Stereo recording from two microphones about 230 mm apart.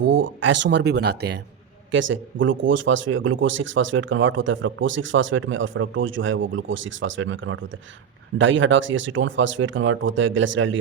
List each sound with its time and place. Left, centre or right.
0.0 s speech: right